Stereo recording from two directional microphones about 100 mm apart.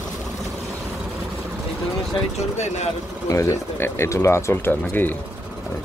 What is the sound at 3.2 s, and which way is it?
Speech, 30° left (ahead or behind).